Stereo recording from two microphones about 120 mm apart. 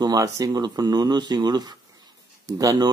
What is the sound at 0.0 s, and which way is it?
Speech, 30° right (ahead or behind).